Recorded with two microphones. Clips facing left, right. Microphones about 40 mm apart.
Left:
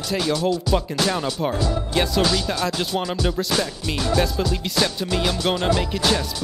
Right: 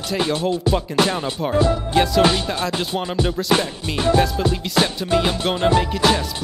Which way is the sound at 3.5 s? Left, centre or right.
Right.